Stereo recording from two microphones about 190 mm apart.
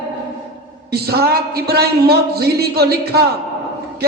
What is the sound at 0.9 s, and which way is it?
A man's voice, 55° right (ahead or behind).